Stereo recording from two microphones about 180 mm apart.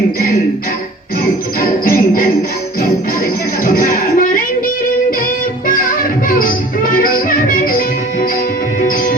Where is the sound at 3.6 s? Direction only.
50° left (ahead or behind).